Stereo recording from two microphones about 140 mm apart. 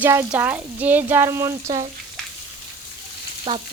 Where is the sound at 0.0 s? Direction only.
15° right (ahead or behind).